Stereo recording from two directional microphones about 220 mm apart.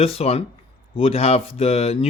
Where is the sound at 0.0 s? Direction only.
25° left (ahead or behind).